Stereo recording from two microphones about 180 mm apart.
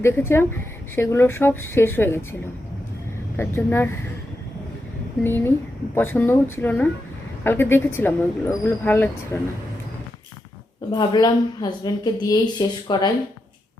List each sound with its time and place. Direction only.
0.0 s speech: 15° left (ahead or behind)
3.3 s speech: 15° left (ahead or behind)
5.2 s speech: 15° left (ahead or behind)
10.9 s a woman's voice: 25° left (ahead or behind)